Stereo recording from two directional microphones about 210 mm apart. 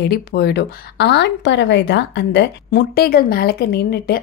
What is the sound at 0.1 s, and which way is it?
Speech, 50° left (ahead or behind).